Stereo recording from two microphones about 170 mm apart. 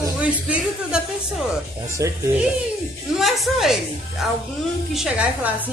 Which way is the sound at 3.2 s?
Centre (ahead or behind).